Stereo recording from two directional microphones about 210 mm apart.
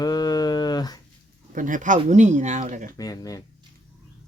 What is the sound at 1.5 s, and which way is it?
Speech, 40° right (ahead or behind).